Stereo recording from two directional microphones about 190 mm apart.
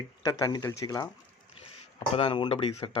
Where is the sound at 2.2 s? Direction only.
25° left (ahead or behind).